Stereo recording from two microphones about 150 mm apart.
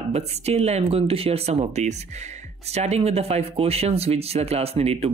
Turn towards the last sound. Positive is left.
turn(degrees=-45)  # may be behind; listen again after turning